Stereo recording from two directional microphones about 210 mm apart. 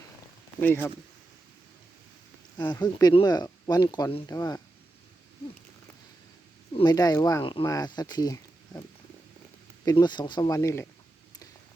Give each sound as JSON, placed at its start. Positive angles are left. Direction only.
{"t": 0.6, "sound": "speech", "side_deg": 10}
{"t": 2.6, "sound": "speech", "side_deg": 20}
{"t": 6.7, "sound": "speech", "side_deg": 20}
{"t": 9.8, "sound": "speech", "side_deg": 20}